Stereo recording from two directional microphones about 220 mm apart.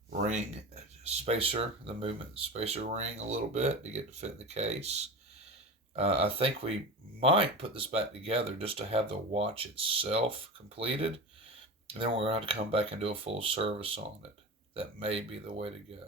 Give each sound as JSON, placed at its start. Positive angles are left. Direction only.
{"t": 0.2, "sound": "speech", "side_deg": -30}